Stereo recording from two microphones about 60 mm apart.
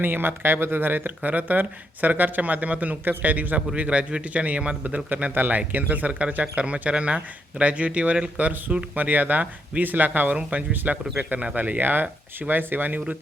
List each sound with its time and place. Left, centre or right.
0.0 s speech: right; by 5.0 s centre
5.0 s speech: right